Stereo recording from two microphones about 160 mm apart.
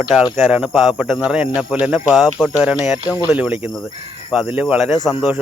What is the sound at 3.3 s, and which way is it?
Speech, 15° right (ahead or behind).